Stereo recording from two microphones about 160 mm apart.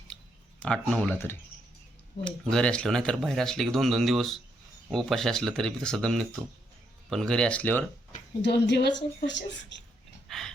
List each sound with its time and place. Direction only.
0.6 s speech: 5° left (ahead or behind)
2.2 s speech: 5° left (ahead or behind)
8.4 s a woman's voice: 90° left
10.2 s a sound: centre (ahead or behind)